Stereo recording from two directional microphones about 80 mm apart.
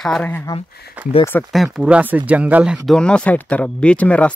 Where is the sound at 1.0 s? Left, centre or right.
Centre.